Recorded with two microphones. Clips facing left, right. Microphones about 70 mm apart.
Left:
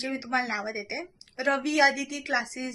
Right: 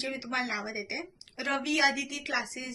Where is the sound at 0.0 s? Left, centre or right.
Left.